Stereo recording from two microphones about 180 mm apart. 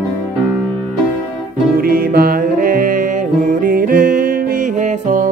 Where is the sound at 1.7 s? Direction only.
55° right (ahead or behind).